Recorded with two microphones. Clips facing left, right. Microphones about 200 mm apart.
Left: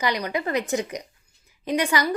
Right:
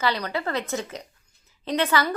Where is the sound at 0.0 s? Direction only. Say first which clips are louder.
Left 1 dB; 15° left (ahead or behind).